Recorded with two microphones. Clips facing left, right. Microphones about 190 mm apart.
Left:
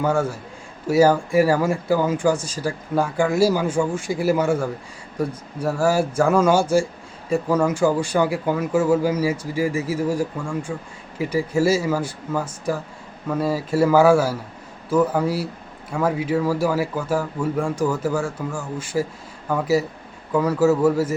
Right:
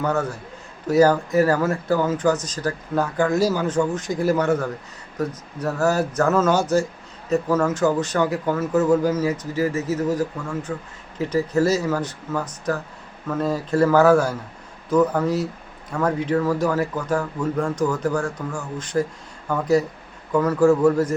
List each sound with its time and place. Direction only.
0.0 s speech: 10° left (ahead or behind)